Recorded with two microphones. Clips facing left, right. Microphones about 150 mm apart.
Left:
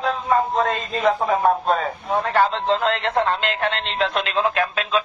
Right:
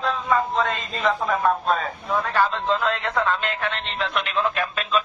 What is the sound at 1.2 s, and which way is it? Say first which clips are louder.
Speech: left 3 dB; 30° left (ahead or behind).